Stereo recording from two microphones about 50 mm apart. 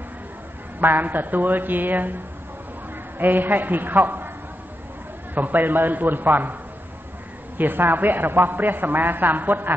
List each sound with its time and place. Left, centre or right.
0.7 s a man's voice: right
3.2 s a man's voice: right
5.3 s a man's voice: right
7.5 s a man's voice: right